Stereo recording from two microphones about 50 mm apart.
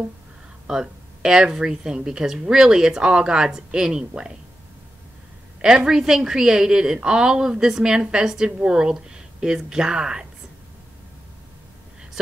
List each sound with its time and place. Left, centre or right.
0.7 s speech: centre
5.9 s speech: centre